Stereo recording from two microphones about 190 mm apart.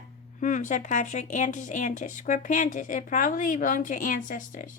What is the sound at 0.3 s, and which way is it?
A woman's voice, 40° left (ahead or behind).